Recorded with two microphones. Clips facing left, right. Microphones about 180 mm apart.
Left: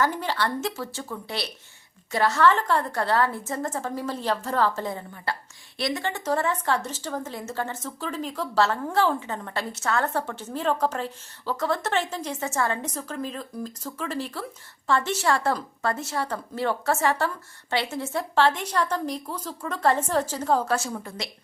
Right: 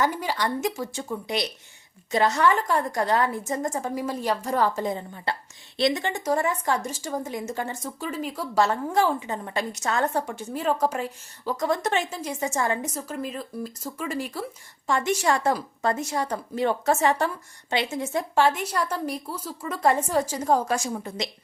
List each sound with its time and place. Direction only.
0.0 s a woman's voice: 10° right (ahead or behind)